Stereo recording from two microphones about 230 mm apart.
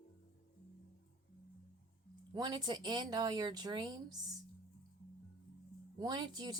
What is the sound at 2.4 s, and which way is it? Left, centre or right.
Speech, centre.